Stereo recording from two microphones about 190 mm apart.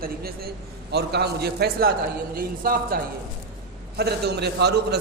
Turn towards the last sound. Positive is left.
turn(degrees=-60)  # may be behind; listen again after turning